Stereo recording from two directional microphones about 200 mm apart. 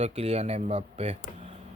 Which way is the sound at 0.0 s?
30° right (ahead or behind).